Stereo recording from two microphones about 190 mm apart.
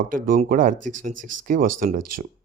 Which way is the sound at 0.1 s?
45° right (ahead or behind).